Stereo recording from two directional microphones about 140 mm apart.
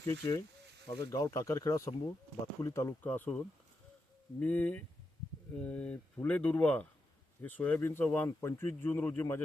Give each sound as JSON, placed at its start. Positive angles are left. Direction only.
{"t": 0.0, "sound": "speech", "side_deg": 25}
{"t": 4.4, "sound": "speech", "side_deg": 10}